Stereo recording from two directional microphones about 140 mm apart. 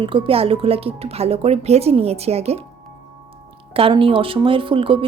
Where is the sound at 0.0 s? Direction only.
40° right (ahead or behind).